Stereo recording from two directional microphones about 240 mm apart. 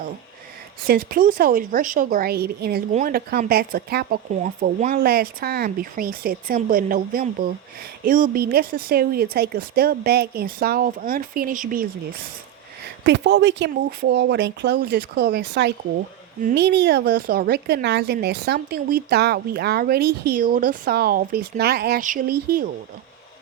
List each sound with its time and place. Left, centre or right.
0.9 s a woman's voice: right
13.1 s a woman's voice: right